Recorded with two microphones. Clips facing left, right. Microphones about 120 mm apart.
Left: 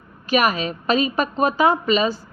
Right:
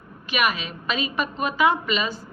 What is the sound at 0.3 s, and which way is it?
A woman's voice, 40° left (ahead or behind).